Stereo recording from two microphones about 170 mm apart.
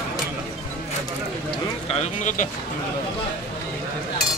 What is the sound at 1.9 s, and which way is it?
Speech, 45° left (ahead or behind).